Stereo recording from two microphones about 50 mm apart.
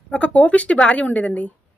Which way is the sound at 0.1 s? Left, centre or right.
Left.